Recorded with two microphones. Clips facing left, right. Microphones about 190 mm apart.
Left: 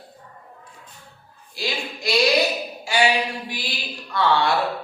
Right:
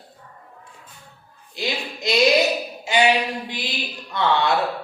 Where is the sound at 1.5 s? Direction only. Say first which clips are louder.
Right 1 dB; 20° right (ahead or behind).